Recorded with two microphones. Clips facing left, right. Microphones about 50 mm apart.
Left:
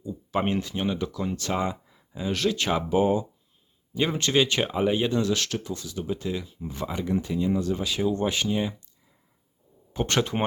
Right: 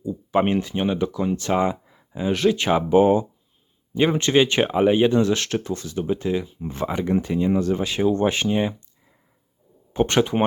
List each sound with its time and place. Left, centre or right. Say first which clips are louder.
0.0 s speech: right 6 dB; right
3.0 s speech: right 5 dB; right
3.9 s speech: right 5 dB; right
6.7 s speech: right 5 dB; right
9.9 s speech: right 6 dB; right